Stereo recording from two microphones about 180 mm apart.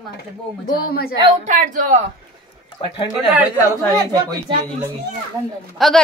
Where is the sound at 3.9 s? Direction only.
20° right (ahead or behind).